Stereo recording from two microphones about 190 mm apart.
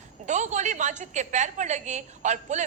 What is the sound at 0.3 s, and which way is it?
A woman's voice, 40° right (ahead or behind).